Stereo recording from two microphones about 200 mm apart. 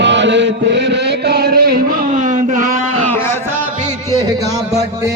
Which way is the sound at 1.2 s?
55° right (ahead or behind).